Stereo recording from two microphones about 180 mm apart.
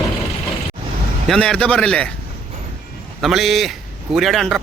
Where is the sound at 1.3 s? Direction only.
5° left (ahead or behind).